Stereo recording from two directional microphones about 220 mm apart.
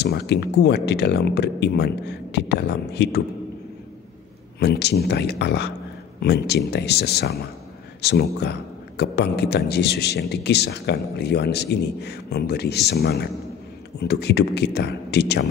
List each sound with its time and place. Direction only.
0.0 s speech: 50° left (ahead or behind)
4.6 s speech: 50° left (ahead or behind)